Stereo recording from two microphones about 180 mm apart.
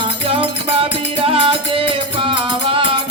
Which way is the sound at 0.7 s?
30° right (ahead or behind).